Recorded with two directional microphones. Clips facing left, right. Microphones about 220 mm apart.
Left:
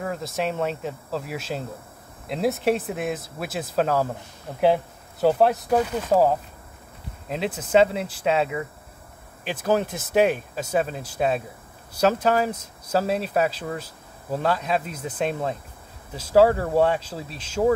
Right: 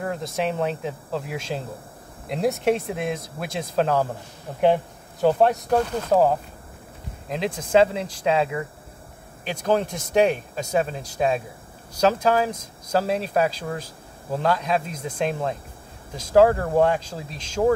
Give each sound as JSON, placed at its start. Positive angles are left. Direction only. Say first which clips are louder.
{"t": 0.0, "sound": "speech", "louder": "right 1 dB", "side_deg": 0}
{"t": 16.2, "sound": "speech", "louder": "right 1 dB", "side_deg": 5}